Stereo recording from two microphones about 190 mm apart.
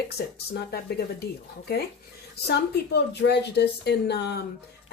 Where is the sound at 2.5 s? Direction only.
60° left (ahead or behind).